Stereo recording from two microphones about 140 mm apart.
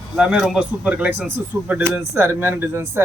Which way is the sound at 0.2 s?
Centre (ahead or behind).